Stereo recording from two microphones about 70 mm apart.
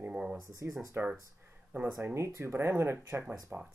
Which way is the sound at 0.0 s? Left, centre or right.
Centre.